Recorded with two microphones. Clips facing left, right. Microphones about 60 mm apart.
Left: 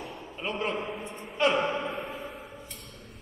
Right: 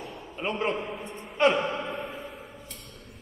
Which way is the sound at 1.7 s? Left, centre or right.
Centre.